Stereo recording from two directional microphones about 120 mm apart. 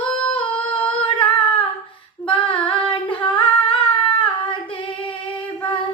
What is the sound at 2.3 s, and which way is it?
Female singing, 45° left (ahead or behind).